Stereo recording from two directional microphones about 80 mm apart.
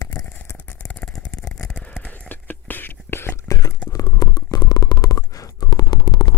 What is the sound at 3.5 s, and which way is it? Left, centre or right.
Stomach rumble, left.